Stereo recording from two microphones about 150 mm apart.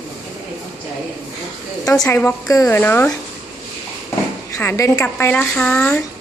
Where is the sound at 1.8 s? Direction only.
20° left (ahead or behind).